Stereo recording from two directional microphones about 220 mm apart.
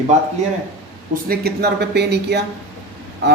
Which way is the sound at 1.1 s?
45° right (ahead or behind).